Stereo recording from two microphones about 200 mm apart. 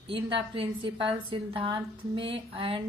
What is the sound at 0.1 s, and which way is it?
A woman's voice, 25° right (ahead or behind).